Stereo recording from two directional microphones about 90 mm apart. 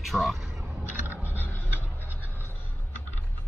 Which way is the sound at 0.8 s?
20° right (ahead or behind).